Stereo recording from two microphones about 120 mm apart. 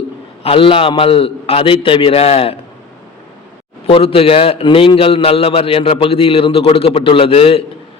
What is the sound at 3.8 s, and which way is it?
A man's voice, 50° left (ahead or behind).